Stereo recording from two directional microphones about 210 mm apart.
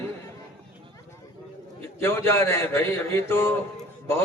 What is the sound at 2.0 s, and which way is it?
Speech, 10° left (ahead or behind).